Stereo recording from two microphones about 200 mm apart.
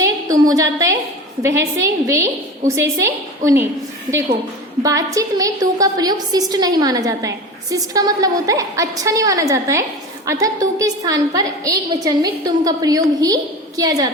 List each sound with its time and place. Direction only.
0.0 s a woman's voice: 15° right (ahead or behind)
4.8 s a woman's voice: 15° right (ahead or behind)